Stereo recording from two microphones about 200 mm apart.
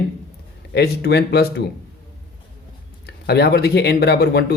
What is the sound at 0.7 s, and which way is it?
Speech, 55° left (ahead or behind).